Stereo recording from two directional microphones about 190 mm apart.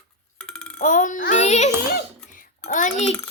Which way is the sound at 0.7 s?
40° left (ahead or behind).